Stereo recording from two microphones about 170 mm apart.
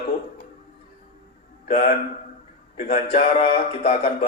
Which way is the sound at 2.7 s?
50° left (ahead or behind).